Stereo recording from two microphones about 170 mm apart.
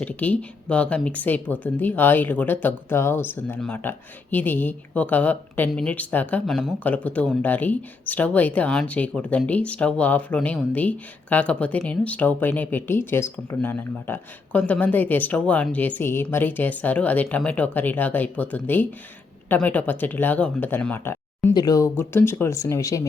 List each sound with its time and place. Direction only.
0.0 s speech: 10° left (ahead or behind)